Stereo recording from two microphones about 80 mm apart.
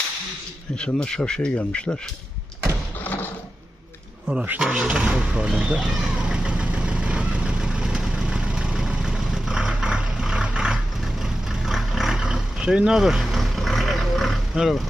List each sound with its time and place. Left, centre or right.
0.8 s speech: centre
3.0 s mechanisms: left
4.3 s speech: centre
5.9 s vehicle: centre